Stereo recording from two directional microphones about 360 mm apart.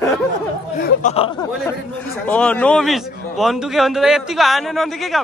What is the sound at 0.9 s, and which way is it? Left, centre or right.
Speech, left.